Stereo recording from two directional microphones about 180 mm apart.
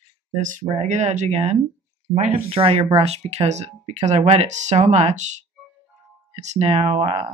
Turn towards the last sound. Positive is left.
turn(degrees=-30)  # may be behind; listen again after turning